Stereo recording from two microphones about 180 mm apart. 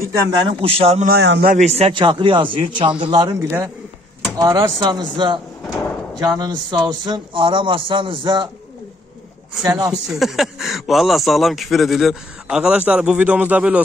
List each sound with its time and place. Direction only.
0.6 s a man's voice: 30° right (ahead or behind)
1.0 s a man's voice: 65° right (ahead or behind)
1.5 s speech: 40° right (ahead or behind)
3.3 s a man's voice: 15° right (ahead or behind)
9.7 s speech: 20° right (ahead or behind)
10.0 s speech: centre (ahead or behind)